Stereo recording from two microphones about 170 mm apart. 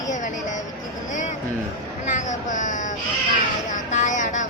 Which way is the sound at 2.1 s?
45° left (ahead or behind).